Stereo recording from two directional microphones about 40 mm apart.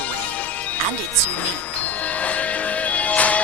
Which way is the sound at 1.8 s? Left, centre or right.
Left.